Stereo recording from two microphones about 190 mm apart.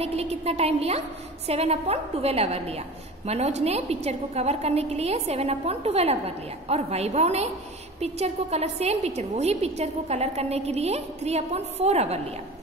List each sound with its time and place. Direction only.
0.0 s a woman's voice: 35° right (ahead or behind)